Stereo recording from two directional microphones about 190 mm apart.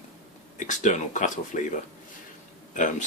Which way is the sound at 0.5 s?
40° left (ahead or behind).